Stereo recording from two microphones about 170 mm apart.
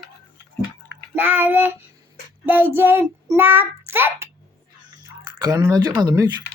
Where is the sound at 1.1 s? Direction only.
10° right (ahead or behind).